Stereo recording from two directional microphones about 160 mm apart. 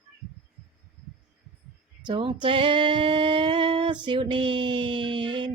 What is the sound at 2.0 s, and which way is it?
Female singing, 30° right (ahead or behind).